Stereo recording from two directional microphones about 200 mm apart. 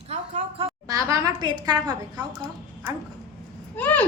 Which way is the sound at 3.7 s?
10° left (ahead or behind).